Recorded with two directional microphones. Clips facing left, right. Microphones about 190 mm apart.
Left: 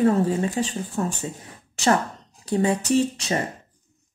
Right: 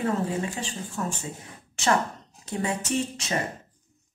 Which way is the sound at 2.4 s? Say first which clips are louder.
Left 7 dB; 35° left (ahead or behind).